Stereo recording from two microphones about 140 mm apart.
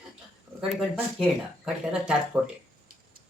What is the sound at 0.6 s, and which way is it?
Speech, centre (ahead or behind).